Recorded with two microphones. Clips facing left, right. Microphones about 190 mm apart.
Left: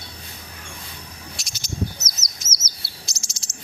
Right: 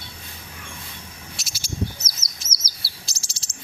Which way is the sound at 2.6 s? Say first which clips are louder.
Left 1 dB; 30° right (ahead or behind).